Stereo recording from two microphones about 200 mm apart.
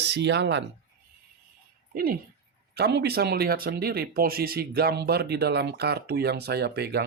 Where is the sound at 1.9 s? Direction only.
45° right (ahead or behind).